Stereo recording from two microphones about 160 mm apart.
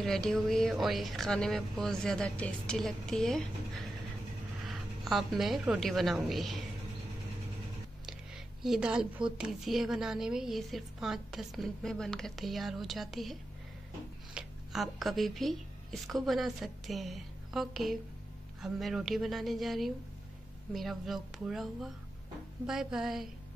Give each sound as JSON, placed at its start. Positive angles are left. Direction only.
{"t": 0.0, "sound": "a woman's voice", "side_deg": 5}
{"t": 4.6, "sound": "a woman's voice", "side_deg": 0}
{"t": 8.6, "sound": "a woman's voice", "side_deg": -5}